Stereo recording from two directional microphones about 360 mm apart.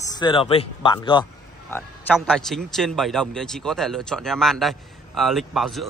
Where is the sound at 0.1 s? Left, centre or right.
Centre.